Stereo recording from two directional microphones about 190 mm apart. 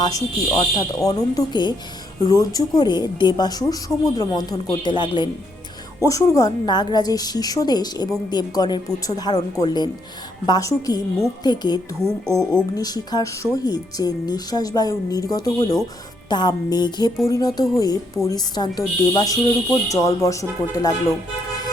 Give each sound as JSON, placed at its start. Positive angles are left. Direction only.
{"t": 0.0, "sound": "speech", "side_deg": 20}
{"t": 12.0, "sound": "speech", "side_deg": 0}
{"t": 12.7, "sound": "speech", "side_deg": 20}